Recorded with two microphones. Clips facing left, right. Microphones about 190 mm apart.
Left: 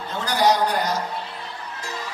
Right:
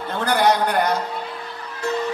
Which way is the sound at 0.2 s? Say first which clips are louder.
Right 1 dB; 55° right (ahead or behind).